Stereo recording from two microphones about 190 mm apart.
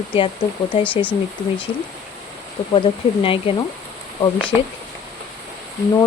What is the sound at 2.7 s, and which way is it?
Speech, 30° left (ahead or behind).